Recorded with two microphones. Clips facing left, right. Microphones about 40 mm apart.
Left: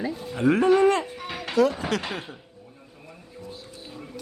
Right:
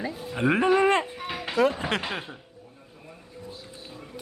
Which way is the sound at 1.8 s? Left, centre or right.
Right.